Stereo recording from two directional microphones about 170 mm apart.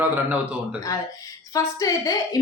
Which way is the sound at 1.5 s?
20° left (ahead or behind).